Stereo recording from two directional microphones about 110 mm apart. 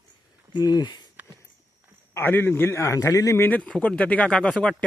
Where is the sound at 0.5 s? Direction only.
35° left (ahead or behind).